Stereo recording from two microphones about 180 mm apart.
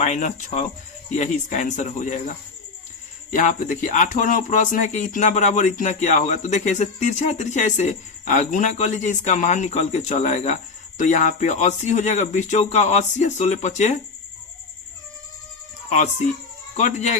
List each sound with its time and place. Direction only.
0.0 s speech: 40° left (ahead or behind)
15.9 s speech: 40° left (ahead or behind)